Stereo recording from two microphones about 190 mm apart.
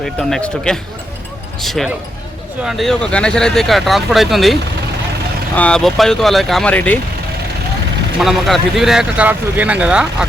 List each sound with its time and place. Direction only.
0.0 s speech: centre (ahead or behind)
5.5 s speech: 5° left (ahead or behind)
8.2 s speech: centre (ahead or behind)